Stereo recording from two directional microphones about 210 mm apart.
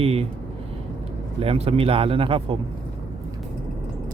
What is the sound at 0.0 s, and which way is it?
Speech, 30° right (ahead or behind).